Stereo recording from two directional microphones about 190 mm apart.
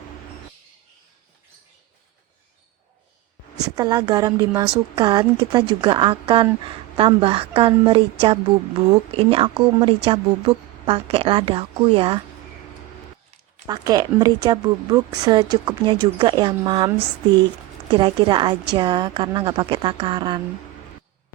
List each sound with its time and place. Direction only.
3.6 s speech: 20° right (ahead or behind)
13.7 s speech: 20° right (ahead or behind)
17.9 s speech: 25° right (ahead or behind)